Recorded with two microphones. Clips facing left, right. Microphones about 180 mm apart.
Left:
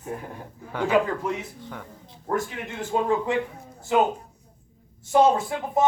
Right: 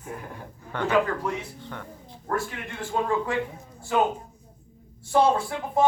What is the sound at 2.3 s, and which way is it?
Speech, 20° left (ahead or behind).